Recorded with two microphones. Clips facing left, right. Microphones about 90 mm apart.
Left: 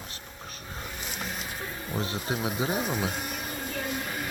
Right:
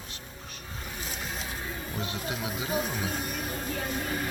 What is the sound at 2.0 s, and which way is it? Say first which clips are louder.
Speech: left 4 dB; 35° left (ahead or behind).